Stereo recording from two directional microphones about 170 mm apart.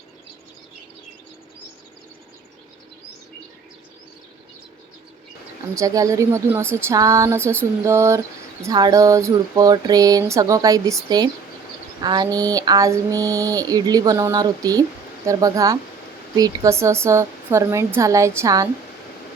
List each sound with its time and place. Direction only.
5.7 s speech: 20° right (ahead or behind)
8.6 s a sound: 20° right (ahead or behind)
16.4 s speech: 20° right (ahead or behind)